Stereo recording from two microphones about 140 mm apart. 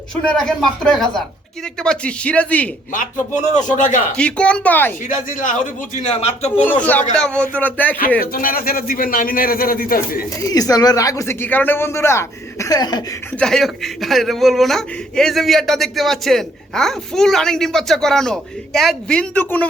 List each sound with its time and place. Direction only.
0.3 s speech: 5° left (ahead or behind)
2.9 s a man's voice: 65° left (ahead or behind)
4.2 s speech: 10° left (ahead or behind)
5.0 s a man's voice: 65° left (ahead or behind); by 6.5 s 45° left (ahead or behind)
7.2 s speech: 5° left (ahead or behind)
8.2 s a man's voice: 90° left
10.4 s speech: 25° left (ahead or behind)
13.4 s speech: centre (ahead or behind)